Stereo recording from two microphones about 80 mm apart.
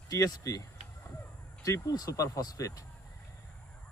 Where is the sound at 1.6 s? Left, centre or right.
Left.